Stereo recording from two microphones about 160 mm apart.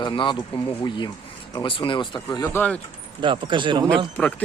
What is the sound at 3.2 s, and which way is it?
Speech, 30° right (ahead or behind).